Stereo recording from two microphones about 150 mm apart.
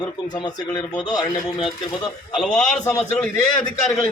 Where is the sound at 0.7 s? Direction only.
25° left (ahead or behind).